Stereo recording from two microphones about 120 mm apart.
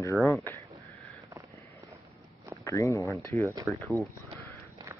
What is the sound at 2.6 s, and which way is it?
Speech, 25° left (ahead or behind).